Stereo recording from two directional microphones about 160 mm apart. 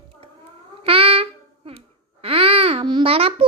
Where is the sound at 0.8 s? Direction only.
35° right (ahead or behind).